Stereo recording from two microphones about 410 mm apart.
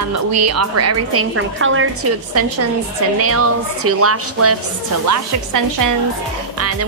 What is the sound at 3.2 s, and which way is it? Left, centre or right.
Speech, right.